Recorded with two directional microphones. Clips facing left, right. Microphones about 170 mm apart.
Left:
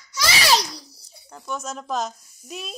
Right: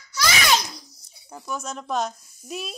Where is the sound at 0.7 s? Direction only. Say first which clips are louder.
Left 3 dB; 35° left (ahead or behind).